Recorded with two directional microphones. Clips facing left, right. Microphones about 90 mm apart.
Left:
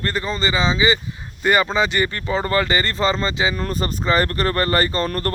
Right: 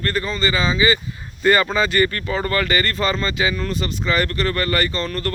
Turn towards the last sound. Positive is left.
turn(degrees=40)  # may be behind; listen again after turning